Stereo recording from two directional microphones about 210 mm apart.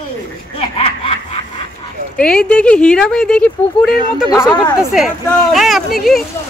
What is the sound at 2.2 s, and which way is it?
Speech, 5° left (ahead or behind).